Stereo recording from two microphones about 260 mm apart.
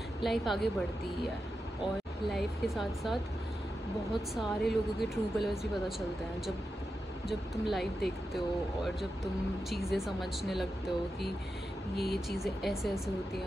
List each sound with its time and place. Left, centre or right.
0.2 s speech: centre
2.2 s speech: centre
12.0 s speech: centre